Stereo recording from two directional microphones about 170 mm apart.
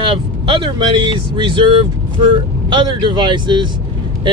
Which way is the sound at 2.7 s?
30° right (ahead or behind).